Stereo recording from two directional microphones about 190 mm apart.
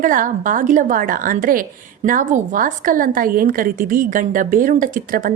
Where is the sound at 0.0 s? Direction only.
45° right (ahead or behind).